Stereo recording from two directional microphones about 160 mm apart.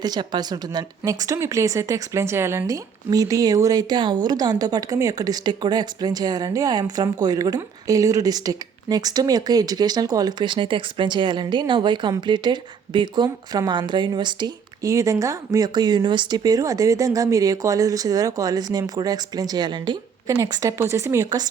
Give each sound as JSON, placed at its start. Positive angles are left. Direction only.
{"t": 0.0, "sound": "speech", "side_deg": -25}